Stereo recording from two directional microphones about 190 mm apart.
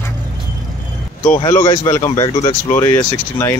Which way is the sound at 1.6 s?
15° left (ahead or behind).